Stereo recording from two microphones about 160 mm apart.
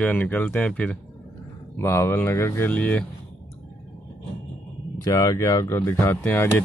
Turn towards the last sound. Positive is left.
turn(degrees=15)  # may be behind; listen again after turning